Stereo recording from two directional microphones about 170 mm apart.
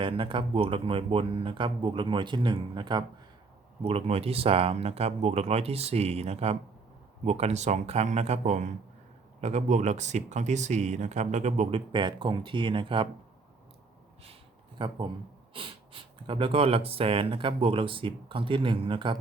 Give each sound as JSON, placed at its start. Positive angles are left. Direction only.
{"t": 0.0, "sound": "speech", "side_deg": -30}
{"t": 14.8, "sound": "speech", "side_deg": -30}